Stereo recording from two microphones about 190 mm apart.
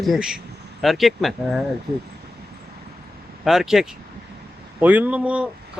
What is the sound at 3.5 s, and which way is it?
Speech, centre (ahead or behind).